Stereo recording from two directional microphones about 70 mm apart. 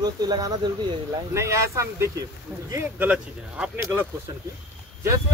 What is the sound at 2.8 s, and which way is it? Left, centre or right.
Speech, right.